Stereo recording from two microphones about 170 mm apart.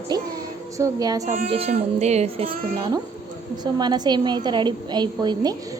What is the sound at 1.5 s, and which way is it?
Music, 35° right (ahead or behind).